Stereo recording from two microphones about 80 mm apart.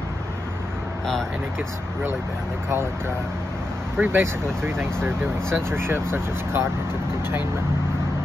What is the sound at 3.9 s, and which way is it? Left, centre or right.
Speech, right.